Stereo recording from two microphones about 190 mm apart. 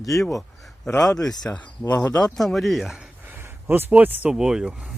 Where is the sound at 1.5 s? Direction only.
15° left (ahead or behind).